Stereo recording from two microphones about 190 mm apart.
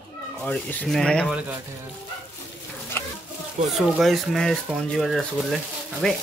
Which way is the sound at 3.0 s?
15° left (ahead or behind).